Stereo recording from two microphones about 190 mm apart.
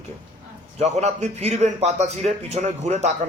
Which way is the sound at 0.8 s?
35° right (ahead or behind).